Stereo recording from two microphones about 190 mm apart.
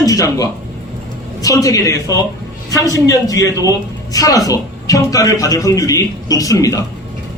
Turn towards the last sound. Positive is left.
turn(degrees=20)  # may be behind; listen again after turning